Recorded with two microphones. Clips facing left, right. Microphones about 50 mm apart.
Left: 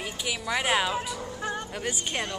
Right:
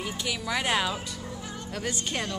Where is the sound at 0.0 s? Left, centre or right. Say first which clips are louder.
Even; centre.